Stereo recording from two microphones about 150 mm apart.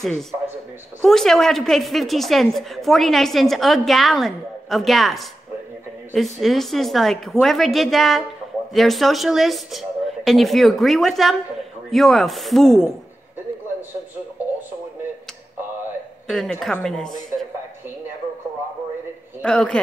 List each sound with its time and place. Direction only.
1.0 s a woman's voice: centre (ahead or behind)
16.3 s a woman's voice: 5° left (ahead or behind)
19.4 s a woman's voice: 5° left (ahead or behind)